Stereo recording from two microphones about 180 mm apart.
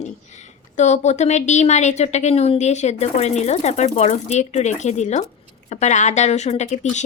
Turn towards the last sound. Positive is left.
turn(degrees=40)  # may be behind; listen again after turning